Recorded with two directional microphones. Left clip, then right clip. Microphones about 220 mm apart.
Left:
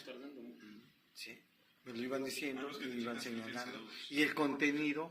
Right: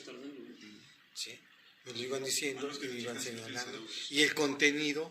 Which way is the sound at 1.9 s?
20° left (ahead or behind).